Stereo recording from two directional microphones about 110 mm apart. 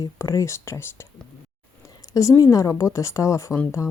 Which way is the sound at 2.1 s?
30° left (ahead or behind).